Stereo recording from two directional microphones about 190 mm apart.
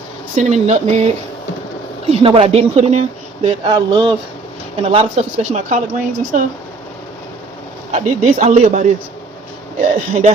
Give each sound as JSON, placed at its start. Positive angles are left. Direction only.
{"t": 0.3, "sound": "speech", "side_deg": -35}
{"t": 2.0, "sound": "speech", "side_deg": -30}
{"t": 7.9, "sound": "speech", "side_deg": -35}